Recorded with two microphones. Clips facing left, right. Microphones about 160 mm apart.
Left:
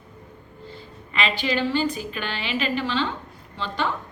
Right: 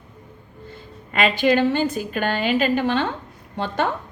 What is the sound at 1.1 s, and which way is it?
A woman's voice, 45° right (ahead or behind).